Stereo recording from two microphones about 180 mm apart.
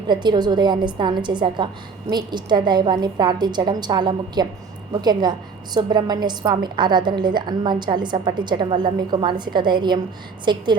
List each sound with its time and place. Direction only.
0.1 s a woman's voice: 25° right (ahead or behind)